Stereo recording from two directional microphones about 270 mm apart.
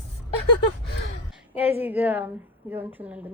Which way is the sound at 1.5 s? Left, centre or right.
Centre.